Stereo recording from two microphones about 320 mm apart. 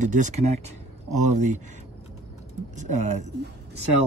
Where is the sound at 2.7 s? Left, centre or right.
Right.